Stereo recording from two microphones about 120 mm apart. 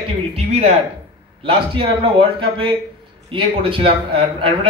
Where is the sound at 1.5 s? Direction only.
45° right (ahead or behind).